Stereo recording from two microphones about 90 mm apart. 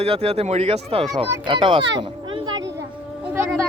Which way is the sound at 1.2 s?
70° right (ahead or behind).